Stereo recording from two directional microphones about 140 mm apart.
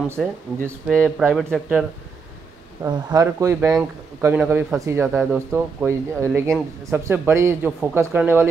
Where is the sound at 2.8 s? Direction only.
25° right (ahead or behind).